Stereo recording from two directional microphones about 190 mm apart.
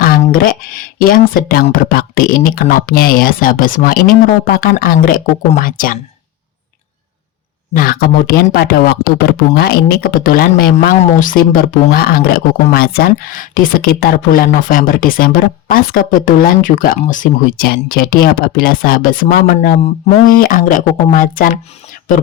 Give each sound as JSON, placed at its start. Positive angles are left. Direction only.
{"t": 0.3, "sound": "speech", "side_deg": 50}
{"t": 7.7, "sound": "speech", "side_deg": 50}